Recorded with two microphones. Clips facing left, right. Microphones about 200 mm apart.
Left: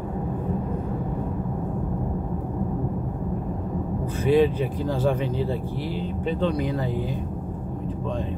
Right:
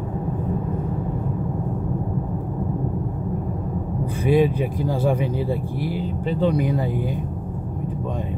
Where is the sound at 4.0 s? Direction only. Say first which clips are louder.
Right 1 dB; 10° right (ahead or behind).